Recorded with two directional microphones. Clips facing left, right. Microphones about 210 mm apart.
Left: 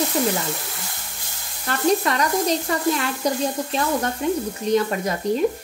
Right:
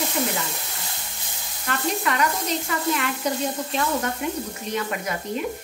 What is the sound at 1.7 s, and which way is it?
Speech, 35° left (ahead or behind).